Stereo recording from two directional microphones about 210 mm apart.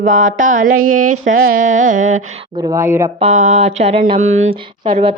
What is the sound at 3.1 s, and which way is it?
A woman's voice, 35° right (ahead or behind).